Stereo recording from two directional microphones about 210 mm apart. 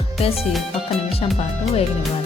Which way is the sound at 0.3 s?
Centre (ahead or behind).